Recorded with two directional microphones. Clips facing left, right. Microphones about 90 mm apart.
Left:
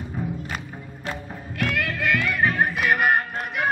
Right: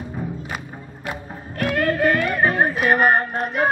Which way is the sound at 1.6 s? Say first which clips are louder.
Right 7 dB; 40° right (ahead or behind).